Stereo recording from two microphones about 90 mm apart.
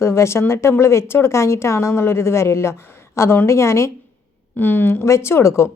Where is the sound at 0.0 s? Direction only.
30° left (ahead or behind).